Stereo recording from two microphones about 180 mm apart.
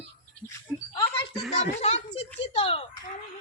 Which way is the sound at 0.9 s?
25° left (ahead or behind).